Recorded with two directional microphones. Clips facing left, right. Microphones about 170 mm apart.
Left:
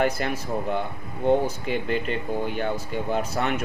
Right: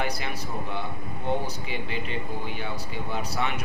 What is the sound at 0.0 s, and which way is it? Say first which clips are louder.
Speech: left 7 dB; 45° left (ahead or behind).